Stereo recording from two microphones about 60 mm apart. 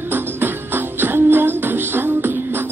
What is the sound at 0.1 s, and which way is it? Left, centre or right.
Music, right.